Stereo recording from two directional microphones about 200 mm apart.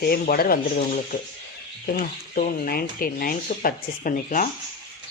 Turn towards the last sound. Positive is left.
turn(degrees=40)  # may be behind; listen again after turning